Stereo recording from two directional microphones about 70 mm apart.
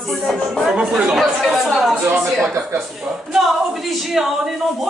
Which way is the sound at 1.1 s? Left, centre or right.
Centre.